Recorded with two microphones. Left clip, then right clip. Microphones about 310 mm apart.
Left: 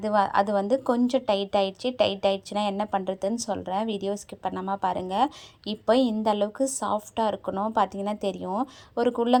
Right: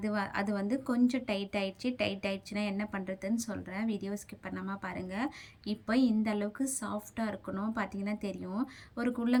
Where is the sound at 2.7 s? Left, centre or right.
Left.